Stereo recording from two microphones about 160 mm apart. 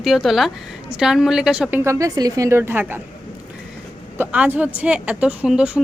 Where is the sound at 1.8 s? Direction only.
20° right (ahead or behind).